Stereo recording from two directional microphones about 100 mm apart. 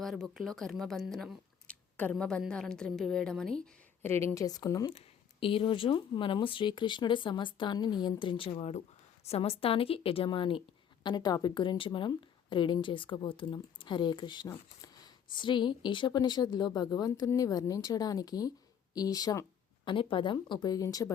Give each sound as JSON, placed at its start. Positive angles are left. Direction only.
{"t": 0.0, "sound": "a woman's voice", "side_deg": 0}
{"t": 4.0, "sound": "a woman's voice", "side_deg": 25}
{"t": 4.4, "sound": "speech", "side_deg": 40}
{"t": 4.9, "sound": "a woman's voice", "side_deg": 65}
{"t": 10.2, "sound": "speech", "side_deg": 60}
{"t": 11.0, "sound": "speech", "side_deg": 45}
{"t": 14.4, "sound": "speech", "side_deg": 40}
{"t": 19.8, "sound": "speech", "side_deg": 60}